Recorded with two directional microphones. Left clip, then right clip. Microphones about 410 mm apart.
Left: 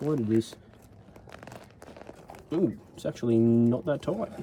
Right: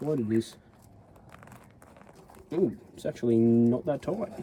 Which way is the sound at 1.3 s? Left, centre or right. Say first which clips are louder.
Left 6 dB; left.